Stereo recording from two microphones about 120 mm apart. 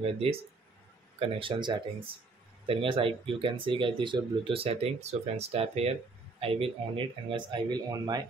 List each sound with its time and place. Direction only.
0.0 s speech: 50° right (ahead or behind)
1.4 s speech: 40° right (ahead or behind)